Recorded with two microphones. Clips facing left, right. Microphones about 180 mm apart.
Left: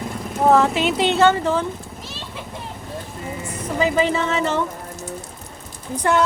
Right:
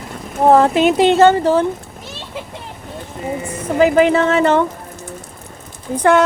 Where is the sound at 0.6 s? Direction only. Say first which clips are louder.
Right 7 dB; 50° right (ahead or behind).